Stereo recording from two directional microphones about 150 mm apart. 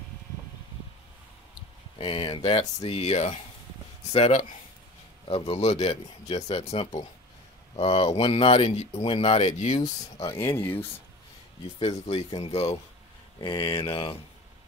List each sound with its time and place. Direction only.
2.0 s speech: 35° left (ahead or behind); by 9.8 s 50° left (ahead or behind)
10.2 s speech: 15° left (ahead or behind)
12.4 s speech: 40° left (ahead or behind)